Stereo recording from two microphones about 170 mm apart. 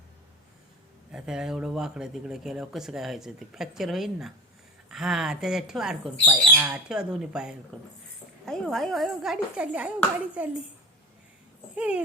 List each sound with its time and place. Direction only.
1.1 s speech: 5° right (ahead or behind)
11.7 s speech: 5° right (ahead or behind)